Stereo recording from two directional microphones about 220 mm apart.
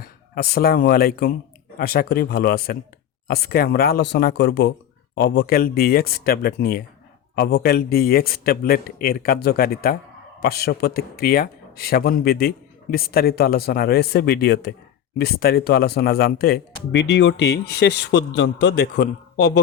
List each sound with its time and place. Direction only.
0.0 s speech: 45° left (ahead or behind)